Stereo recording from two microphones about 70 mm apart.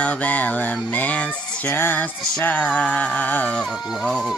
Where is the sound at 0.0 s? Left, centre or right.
Centre.